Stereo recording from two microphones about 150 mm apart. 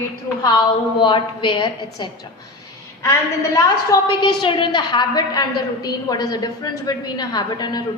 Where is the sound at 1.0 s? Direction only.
35° left (ahead or behind).